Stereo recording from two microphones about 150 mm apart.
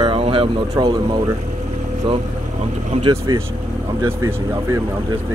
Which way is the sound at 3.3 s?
25° right (ahead or behind).